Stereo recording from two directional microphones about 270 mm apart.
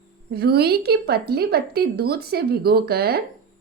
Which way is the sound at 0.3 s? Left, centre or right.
Right.